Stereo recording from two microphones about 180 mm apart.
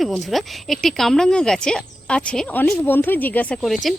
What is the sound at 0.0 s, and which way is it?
Speech, centre (ahead or behind).